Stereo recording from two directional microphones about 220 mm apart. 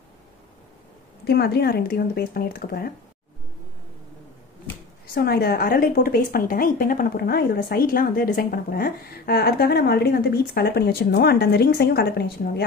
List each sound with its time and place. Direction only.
1.2 s a woman's voice: 45° left (ahead or behind)
5.1 s a woman's voice: 45° left (ahead or behind)